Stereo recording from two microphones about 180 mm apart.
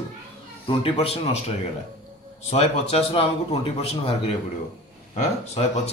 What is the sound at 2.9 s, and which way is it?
A man's voice, 35° left (ahead or behind).